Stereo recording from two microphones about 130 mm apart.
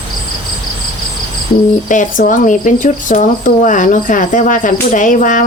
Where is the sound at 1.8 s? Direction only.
80° left.